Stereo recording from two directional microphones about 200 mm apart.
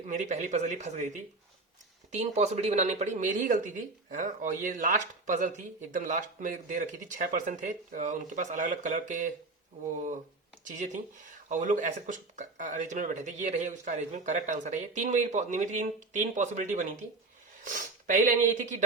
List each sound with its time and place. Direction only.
0.0 s speech: 35° right (ahead or behind)